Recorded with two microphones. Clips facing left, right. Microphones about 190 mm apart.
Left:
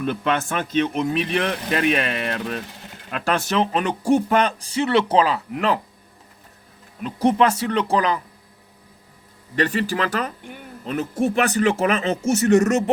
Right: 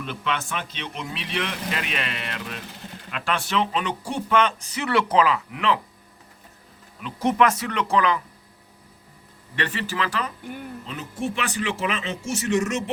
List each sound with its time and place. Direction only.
0.0 s speech: 50° left (ahead or behind)
7.0 s speech: 35° left (ahead or behind)
9.6 s speech: 40° left (ahead or behind)